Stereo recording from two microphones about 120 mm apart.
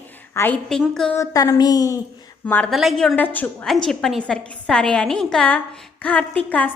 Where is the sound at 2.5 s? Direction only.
15° left (ahead or behind).